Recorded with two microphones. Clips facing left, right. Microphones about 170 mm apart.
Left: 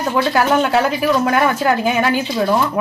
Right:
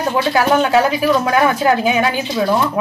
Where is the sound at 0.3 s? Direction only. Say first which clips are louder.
Right 2 dB; 10° right (ahead or behind).